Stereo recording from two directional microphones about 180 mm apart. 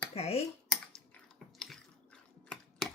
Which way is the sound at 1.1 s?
Centre (ahead or behind).